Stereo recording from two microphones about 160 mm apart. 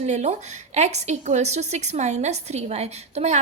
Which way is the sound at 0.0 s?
45° right (ahead or behind).